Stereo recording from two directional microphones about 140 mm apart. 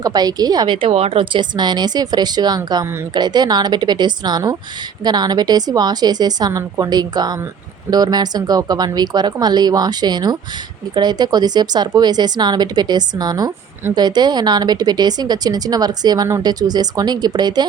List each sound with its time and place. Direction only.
0.0 s speech: 30° right (ahead or behind)